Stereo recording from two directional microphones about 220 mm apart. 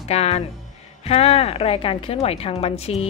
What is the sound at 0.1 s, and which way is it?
A woman's voice, 30° left (ahead or behind).